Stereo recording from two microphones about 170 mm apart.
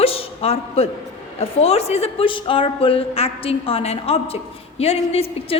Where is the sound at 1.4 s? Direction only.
35° left (ahead or behind).